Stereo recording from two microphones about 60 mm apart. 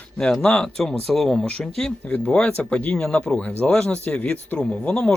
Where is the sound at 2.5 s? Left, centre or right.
Left.